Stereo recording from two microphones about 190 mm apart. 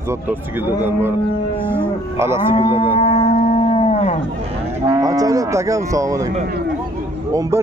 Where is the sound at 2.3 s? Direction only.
25° left (ahead or behind).